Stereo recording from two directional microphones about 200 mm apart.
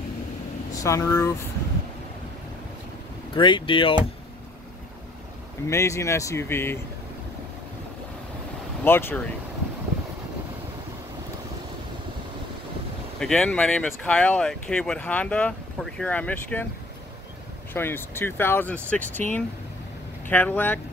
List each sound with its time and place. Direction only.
0.8 s speech: 15° left (ahead or behind)
3.3 s speech: 25° left (ahead or behind)
5.7 s speech: 15° left (ahead or behind)
8.8 s speech: 10° left (ahead or behind)
13.2 s speech: 5° left (ahead or behind)
17.7 s speech: 10° left (ahead or behind)